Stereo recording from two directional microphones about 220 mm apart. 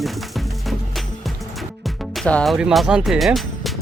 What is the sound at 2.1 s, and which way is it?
Speech, 5° left (ahead or behind).